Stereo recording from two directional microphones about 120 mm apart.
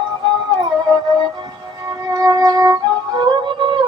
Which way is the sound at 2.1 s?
30° right (ahead or behind).